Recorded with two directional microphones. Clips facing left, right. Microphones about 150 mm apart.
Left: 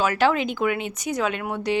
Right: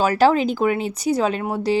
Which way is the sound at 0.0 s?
35° right (ahead or behind).